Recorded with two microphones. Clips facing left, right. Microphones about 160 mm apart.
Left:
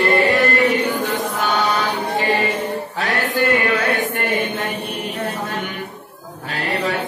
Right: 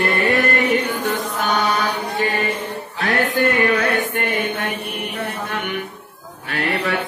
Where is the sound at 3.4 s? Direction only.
50° right (ahead or behind).